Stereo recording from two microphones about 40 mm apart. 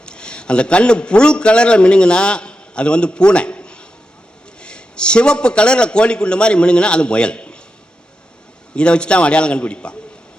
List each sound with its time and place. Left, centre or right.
0.0 s a man's voice: left
8.7 s a man's voice: left